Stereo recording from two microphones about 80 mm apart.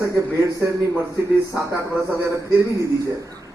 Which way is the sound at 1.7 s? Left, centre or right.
Right.